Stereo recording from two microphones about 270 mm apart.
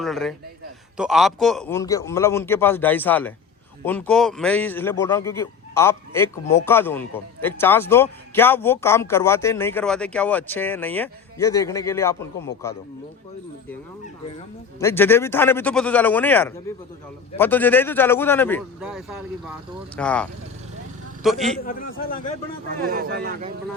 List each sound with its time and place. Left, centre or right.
0.0 s a man's voice: centre
14.8 s a man's voice: centre
21.2 s speech: centre
21.6 s a man's voice: left
22.8 s speech: right